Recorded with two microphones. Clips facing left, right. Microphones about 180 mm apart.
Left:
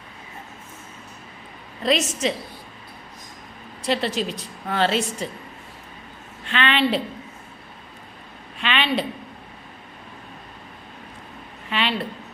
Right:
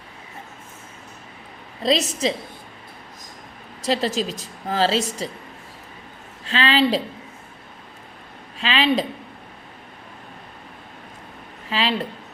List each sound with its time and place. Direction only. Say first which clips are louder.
1.8 s a woman's voice: right 1 dB; 35° right (ahead or behind)
3.8 s a woman's voice: right 1 dB; 40° right (ahead or behind)
6.5 s a woman's voice: right 2 dB; 35° right (ahead or behind)
8.6 s a woman's voice: right 3 dB; 35° right (ahead or behind)
11.7 s a woman's voice: right 2 dB; 35° right (ahead or behind)